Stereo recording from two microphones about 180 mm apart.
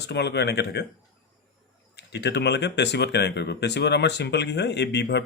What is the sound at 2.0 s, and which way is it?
Speech, 70° left (ahead or behind).